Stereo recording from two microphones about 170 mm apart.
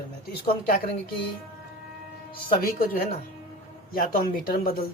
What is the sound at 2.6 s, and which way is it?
Speech, 55° left (ahead or behind).